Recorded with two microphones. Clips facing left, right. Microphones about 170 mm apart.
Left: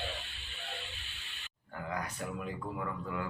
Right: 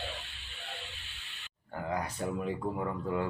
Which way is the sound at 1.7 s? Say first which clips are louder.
Right 4 dB; 30° right (ahead or behind).